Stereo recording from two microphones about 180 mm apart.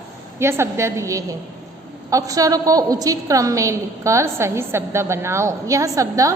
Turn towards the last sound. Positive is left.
turn(degrees=-20)  # may be behind; listen again after turning